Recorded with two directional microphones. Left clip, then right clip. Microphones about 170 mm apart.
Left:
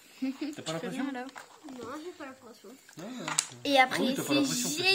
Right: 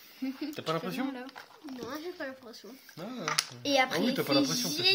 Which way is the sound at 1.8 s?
75° right (ahead or behind).